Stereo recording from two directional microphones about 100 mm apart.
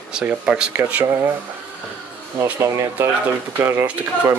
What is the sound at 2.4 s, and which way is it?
Speech, 25° right (ahead or behind).